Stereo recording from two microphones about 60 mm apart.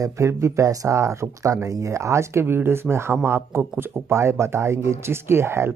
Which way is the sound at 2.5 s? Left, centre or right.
Right.